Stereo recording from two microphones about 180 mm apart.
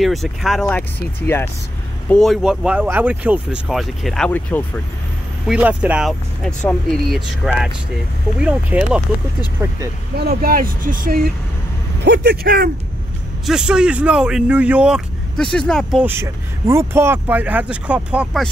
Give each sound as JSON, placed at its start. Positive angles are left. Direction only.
{"t": 0.0, "sound": "speech", "side_deg": 0}
{"t": 5.5, "sound": "speech", "side_deg": -10}
{"t": 10.1, "sound": "speech", "side_deg": -60}
{"t": 12.0, "sound": "speech", "side_deg": -70}
{"t": 13.5, "sound": "speech", "side_deg": -5}
{"t": 16.0, "sound": "speech", "side_deg": -15}